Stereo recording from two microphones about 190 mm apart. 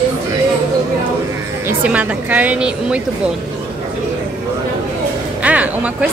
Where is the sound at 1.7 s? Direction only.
10° right (ahead or behind).